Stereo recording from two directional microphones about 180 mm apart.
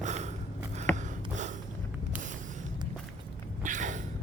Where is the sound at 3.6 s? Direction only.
45° right (ahead or behind).